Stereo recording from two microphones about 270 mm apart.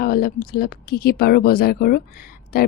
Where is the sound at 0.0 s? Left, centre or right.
Left.